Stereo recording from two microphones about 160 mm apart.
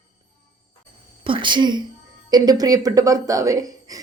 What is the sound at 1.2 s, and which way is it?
A woman's voice, 30° right (ahead or behind).